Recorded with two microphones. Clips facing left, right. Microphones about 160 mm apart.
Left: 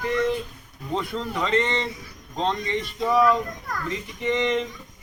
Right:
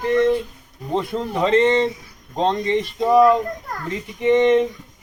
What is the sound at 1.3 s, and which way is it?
Speech, 25° right (ahead or behind).